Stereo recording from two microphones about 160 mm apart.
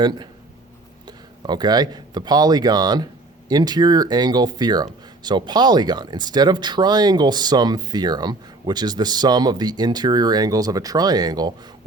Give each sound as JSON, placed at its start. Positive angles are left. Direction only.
{"t": 0.0, "sound": "speech", "side_deg": -25}